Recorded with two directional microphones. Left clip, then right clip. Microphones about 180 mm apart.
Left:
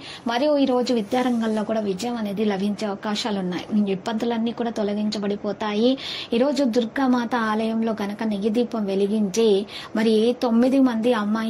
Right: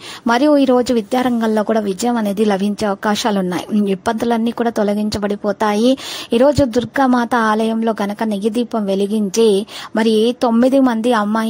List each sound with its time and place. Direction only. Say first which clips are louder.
0.3 s speech: right 8 dB; 45° right (ahead or behind)